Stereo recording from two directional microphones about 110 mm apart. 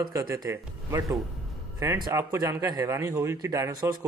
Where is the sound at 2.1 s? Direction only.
30° right (ahead or behind).